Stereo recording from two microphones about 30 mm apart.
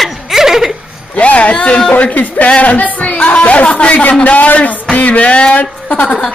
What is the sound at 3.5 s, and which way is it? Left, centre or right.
Music, left.